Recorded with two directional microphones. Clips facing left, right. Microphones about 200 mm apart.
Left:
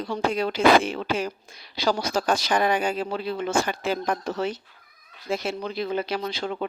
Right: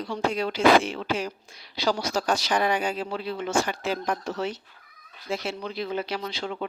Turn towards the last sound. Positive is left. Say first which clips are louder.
# left 3 dB
turn(degrees=45)  # may be behind; listen again after turning